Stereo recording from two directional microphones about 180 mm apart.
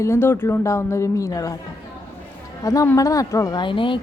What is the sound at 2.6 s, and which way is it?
A woman's voice, 20° left (ahead or behind).